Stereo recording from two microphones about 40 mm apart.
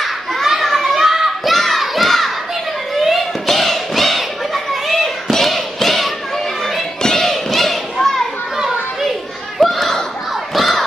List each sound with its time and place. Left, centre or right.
0.0 s children playing: centre
0.9 s children playing: centre
1.5 s crowd: centre
2.9 s a sound: centre
7.0 s a sound: centre
7.2 s children playing: centre
8.5 s children playing: centre
9.6 s a sound: centre
10.5 s crowd: centre